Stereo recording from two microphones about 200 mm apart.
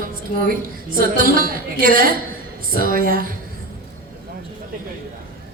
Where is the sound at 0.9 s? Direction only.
45° right (ahead or behind).